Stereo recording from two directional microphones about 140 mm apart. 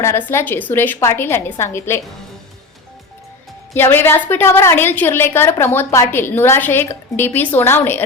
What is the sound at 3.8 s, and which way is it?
A woman's voice, 15° left (ahead or behind).